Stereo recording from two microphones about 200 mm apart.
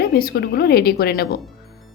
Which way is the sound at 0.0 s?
50° left (ahead or behind).